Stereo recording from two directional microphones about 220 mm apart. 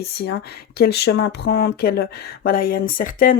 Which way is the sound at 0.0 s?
45° left (ahead or behind).